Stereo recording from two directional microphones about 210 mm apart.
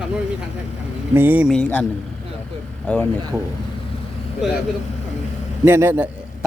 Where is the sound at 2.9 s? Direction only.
5° left (ahead or behind).